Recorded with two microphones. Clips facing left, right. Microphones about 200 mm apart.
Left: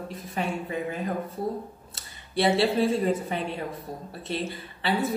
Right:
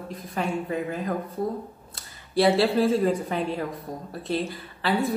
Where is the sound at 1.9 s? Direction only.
Centre (ahead or behind).